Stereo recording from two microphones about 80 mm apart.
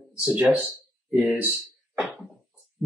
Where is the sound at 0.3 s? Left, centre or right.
Centre.